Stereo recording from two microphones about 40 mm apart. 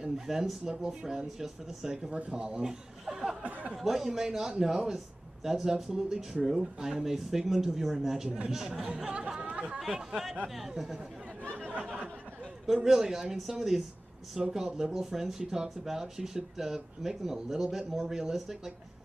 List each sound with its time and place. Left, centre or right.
0.0 s a man's voice: centre
2.0 s speech: right
2.4 s speech: centre
3.4 s a sound: right
3.7 s a man's voice: centre; by 9.8 s right
9.9 s a man's voice: centre
12.6 s a man's voice: centre